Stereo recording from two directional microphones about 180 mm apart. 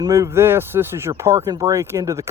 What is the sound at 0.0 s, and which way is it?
Speech, 15° right (ahead or behind).